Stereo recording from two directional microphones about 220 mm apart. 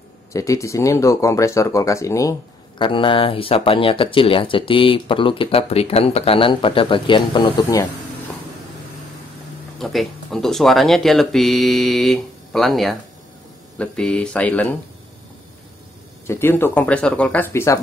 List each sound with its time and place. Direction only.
0.3 s speech: 15° left (ahead or behind)
9.8 s speech: centre (ahead or behind)
16.3 s speech: 10° left (ahead or behind)